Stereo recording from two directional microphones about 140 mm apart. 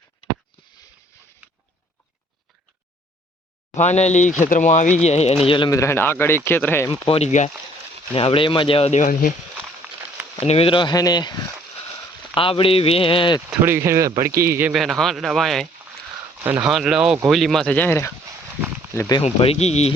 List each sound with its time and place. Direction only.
3.8 s speech: 55° left (ahead or behind); by 5.7 s 35° left (ahead or behind)
5.7 s speech: 20° left (ahead or behind)
6.9 s speech: 40° left (ahead or behind)
8.1 s speech: 40° left (ahead or behind)
8.9 s speech: 65° left (ahead or behind)
10.4 s speech: 45° left (ahead or behind)
13.6 s speech: 15° right (ahead or behind)
14.7 s speech: centre (ahead or behind)
16.6 s speech: 5° right (ahead or behind); by 19.2 s 25° left (ahead or behind)
19.2 s speech: 45° left (ahead or behind)